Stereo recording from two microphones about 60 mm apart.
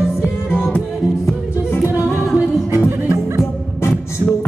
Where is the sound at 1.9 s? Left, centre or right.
Left.